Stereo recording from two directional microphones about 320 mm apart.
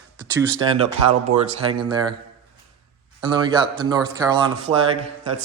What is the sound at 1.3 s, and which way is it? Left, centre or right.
Speech, right.